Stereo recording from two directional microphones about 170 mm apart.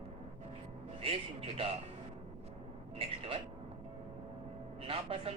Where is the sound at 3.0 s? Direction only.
35° right (ahead or behind).